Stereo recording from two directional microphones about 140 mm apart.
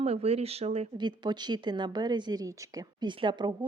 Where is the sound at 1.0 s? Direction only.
30° right (ahead or behind).